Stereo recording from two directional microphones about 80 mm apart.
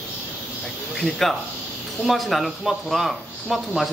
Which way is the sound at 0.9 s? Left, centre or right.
Centre.